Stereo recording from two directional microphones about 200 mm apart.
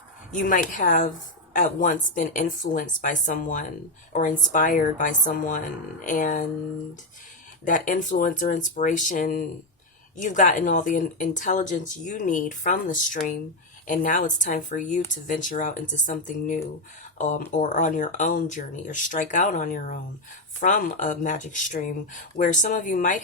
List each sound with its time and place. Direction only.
0.3 s speech: 40° left (ahead or behind)
7.6 s speech: 40° left (ahead or behind)